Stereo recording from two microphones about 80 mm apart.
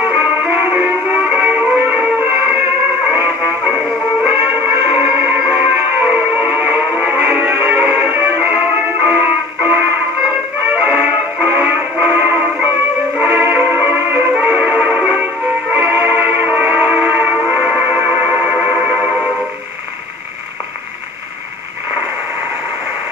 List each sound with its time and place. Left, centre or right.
0.0 s music: right